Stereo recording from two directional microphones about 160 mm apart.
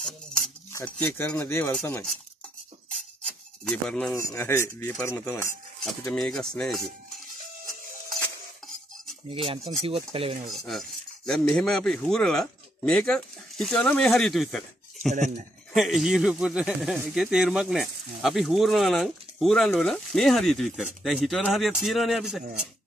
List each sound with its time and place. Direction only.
0.8 s speech: 10° left (ahead or behind)
3.3 s a sound: 5° left (ahead or behind)
4.2 s speech: 20° left (ahead or behind)
6.1 s speech: 5° left (ahead or behind)
9.3 s speech: 35° right (ahead or behind)
10.5 s cutlery: centre (ahead or behind)
15.7 s speech: centre (ahead or behind)